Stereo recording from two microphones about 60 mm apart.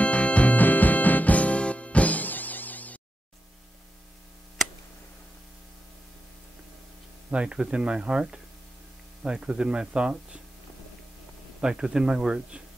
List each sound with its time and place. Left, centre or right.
0.0 s music: left
7.2 s speech: centre
11.6 s speech: centre